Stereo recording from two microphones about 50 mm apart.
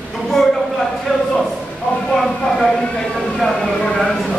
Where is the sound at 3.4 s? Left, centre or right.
Centre.